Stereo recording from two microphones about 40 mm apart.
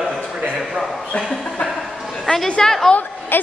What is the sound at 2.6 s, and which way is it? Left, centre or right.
Speech, centre.